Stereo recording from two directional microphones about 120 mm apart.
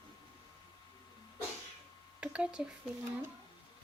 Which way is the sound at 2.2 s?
10° right (ahead or behind).